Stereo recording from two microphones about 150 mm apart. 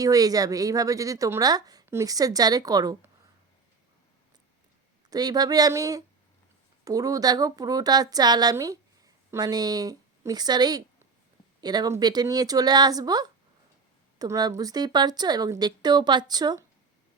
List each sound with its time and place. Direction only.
0.0 s a woman's voice: 25° right (ahead or behind)
5.0 s a woman's voice: 25° right (ahead or behind)